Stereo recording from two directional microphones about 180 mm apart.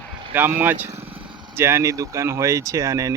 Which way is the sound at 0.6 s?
10° right (ahead or behind).